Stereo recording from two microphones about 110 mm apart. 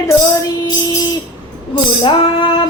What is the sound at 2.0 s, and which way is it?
Female singing, 50° left (ahead or behind).